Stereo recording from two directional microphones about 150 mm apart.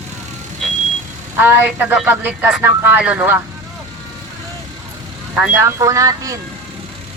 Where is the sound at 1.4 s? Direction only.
15° right (ahead or behind).